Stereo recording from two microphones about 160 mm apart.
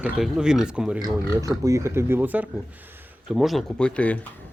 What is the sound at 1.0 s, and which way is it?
Speech, 20° right (ahead or behind).